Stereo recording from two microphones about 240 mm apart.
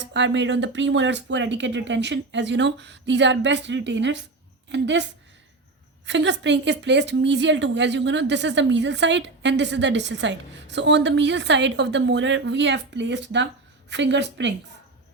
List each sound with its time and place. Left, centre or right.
0.0 s a woman's voice: right
6.1 s a woman's voice: right